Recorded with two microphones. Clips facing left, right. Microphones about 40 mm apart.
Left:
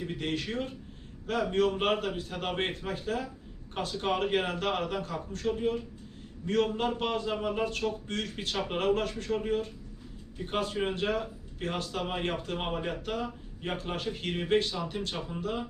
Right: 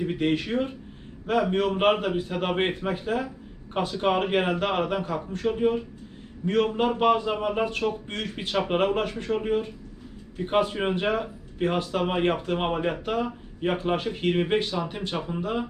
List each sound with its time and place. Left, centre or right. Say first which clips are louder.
0.0 s speech: right 8 dB; right